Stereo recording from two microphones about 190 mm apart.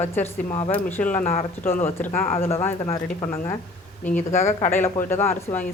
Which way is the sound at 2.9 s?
20° left (ahead or behind).